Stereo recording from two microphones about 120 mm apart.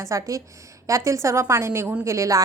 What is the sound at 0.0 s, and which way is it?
A woman's voice, 25° right (ahead or behind).